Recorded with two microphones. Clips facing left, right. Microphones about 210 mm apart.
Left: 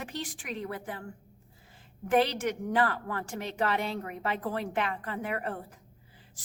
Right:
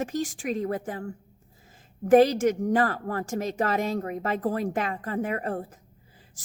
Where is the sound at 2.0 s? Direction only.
45° right (ahead or behind).